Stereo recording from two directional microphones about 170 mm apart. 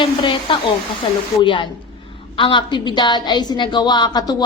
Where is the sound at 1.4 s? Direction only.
30° left (ahead or behind).